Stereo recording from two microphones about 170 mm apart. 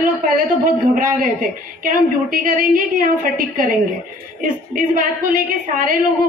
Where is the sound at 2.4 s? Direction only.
55° right (ahead or behind).